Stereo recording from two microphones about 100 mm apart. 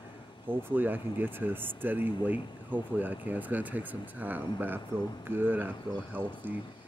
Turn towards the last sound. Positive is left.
turn(degrees=-20)  # may be behind; listen again after turning